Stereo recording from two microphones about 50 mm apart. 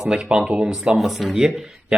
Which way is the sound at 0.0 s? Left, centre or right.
Centre.